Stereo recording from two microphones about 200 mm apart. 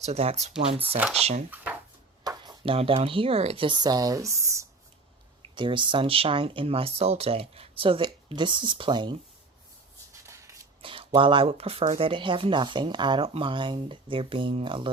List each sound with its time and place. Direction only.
0.0 s speech: 30° right (ahead or behind)
0.9 s speech: 5° right (ahead or behind)
1.2 s speech: 30° right (ahead or behind)
2.2 s speech: 20° right (ahead or behind)
10.2 s a sound: 15° right (ahead or behind)
10.8 s speech: 25° right (ahead or behind)